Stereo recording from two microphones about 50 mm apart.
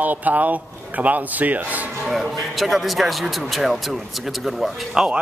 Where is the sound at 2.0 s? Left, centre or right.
Centre.